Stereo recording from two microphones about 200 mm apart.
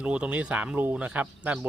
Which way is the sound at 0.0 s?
5° right (ahead or behind).